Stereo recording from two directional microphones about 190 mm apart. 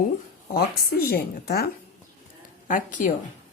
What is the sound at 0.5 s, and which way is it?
Speech, 50° left (ahead or behind).